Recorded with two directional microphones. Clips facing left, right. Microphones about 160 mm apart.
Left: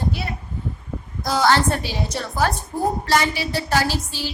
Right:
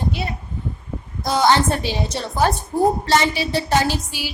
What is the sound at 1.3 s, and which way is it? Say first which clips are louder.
A woman's voice: right 1 dB; 20° right (ahead or behind).